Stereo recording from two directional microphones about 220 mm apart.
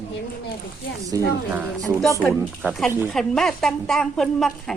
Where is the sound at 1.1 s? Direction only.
15° right (ahead or behind).